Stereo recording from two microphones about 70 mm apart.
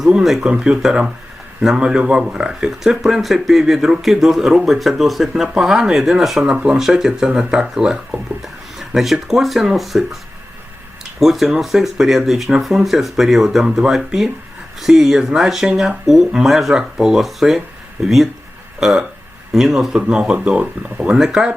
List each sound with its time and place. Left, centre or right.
0.0 s speech: centre
6.4 s speech: centre
11.2 s speech: centre